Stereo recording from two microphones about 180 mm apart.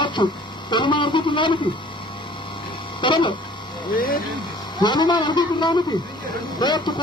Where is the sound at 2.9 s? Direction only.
25° left (ahead or behind).